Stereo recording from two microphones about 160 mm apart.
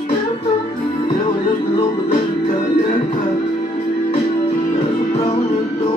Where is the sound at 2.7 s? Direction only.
50° left (ahead or behind).